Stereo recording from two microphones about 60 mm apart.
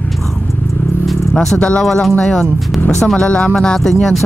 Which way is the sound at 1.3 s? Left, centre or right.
Centre.